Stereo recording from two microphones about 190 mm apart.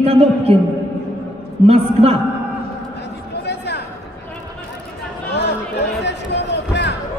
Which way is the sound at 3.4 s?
65° left (ahead or behind).